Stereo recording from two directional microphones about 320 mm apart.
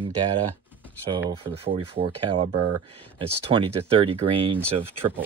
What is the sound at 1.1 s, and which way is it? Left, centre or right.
Speech, centre.